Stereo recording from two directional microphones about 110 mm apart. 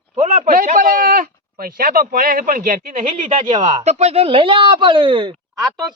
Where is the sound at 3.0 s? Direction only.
90° right; by 5.4 s 50° right (ahead or behind).